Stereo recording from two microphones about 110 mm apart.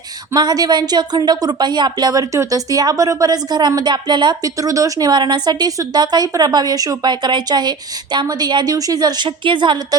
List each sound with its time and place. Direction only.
0.3 s speech: 35° right (ahead or behind)